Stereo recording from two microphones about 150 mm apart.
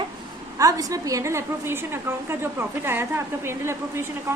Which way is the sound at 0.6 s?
25° right (ahead or behind).